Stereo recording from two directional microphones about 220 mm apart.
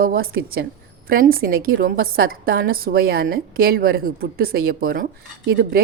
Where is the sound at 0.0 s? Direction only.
40° right (ahead or behind).